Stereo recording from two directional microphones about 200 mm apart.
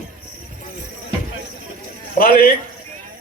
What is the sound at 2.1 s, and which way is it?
Speech, 50° left (ahead or behind).